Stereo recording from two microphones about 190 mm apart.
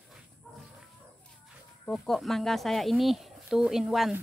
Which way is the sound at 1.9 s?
Centre (ahead or behind).